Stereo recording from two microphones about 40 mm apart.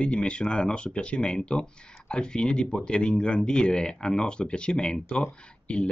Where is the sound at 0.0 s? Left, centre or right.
Left.